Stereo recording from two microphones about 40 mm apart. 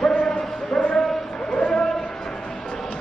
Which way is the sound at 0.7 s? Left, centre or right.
Left.